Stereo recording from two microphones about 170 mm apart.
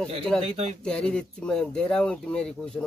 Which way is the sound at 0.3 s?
5° left (ahead or behind).